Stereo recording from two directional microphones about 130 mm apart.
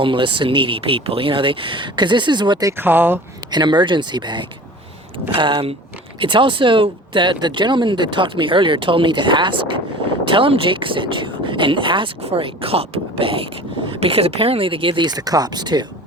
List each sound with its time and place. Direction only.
0.0 s speech: 40° right (ahead or behind)
2.7 s speech: 15° right (ahead or behind)
3.5 s speech: 35° right (ahead or behind)